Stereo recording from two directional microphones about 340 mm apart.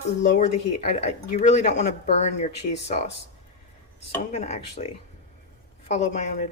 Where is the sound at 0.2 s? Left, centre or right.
Left.